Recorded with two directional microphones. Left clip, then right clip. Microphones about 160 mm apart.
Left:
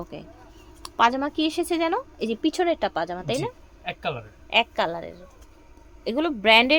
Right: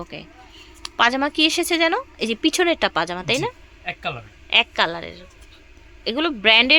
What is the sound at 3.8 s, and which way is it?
Speech, 35° left (ahead or behind).